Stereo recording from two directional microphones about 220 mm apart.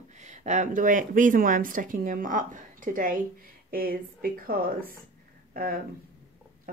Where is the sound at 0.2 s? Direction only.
35° right (ahead or behind).